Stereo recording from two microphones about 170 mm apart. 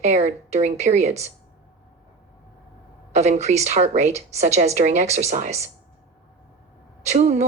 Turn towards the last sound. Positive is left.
turn(degrees=-40)  # may be behind; listen again after turning